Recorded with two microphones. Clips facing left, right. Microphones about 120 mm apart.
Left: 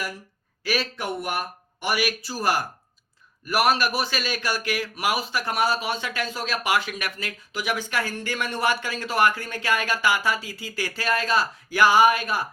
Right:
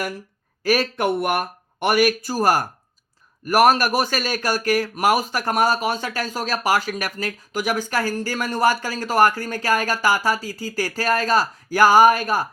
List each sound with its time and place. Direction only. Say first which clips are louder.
0.6 s speech: right 7 dB; 45° right (ahead or behind)